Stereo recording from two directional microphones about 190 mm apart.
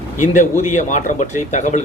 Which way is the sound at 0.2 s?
40° left (ahead or behind).